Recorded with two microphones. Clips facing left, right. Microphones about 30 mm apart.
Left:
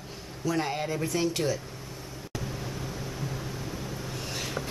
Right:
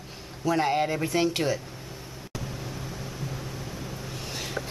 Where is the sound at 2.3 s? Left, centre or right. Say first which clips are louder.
Left 1 dB; centre.